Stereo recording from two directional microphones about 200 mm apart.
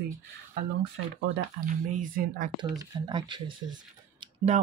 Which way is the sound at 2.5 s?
20° right (ahead or behind).